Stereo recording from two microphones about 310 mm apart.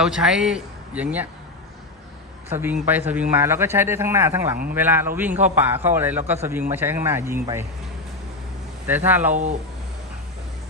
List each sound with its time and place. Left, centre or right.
0.0 s a man's voice: centre
2.5 s a man's voice: centre
8.9 s a man's voice: centre
9.3 s speech: right